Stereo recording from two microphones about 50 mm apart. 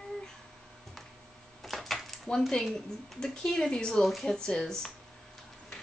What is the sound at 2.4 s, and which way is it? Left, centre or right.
Speech, centre.